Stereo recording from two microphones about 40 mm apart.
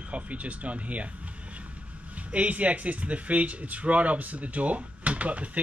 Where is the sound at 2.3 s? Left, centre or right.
Right.